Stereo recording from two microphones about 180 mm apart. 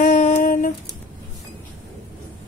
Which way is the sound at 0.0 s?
45° left (ahead or behind).